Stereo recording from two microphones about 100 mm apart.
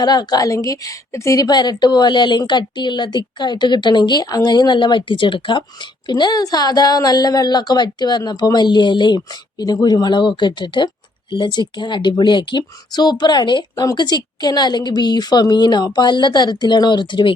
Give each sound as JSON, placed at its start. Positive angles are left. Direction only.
{"t": 0.0, "sound": "a woman's voice", "side_deg": 45}